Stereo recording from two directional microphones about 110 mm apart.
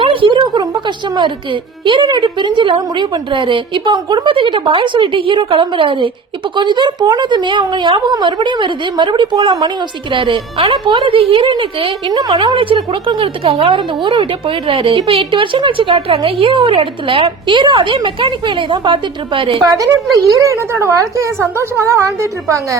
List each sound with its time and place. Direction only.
0.0 s speech: 50° right (ahead or behind)
12.1 s a woman's voice: 40° right (ahead or behind)
12.5 s speech: 50° right (ahead or behind)
20.4 s a woman's voice: 25° right (ahead or behind)